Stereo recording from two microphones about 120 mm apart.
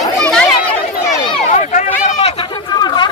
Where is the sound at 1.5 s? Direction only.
90° left.